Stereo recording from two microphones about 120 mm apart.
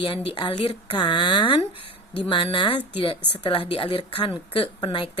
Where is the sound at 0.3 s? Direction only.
50° left (ahead or behind).